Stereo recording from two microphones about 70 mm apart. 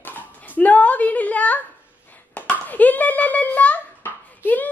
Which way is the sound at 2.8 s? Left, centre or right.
Left.